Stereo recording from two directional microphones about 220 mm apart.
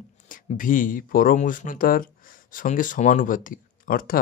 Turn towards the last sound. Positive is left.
turn(degrees=40)  # may be behind; listen again after turning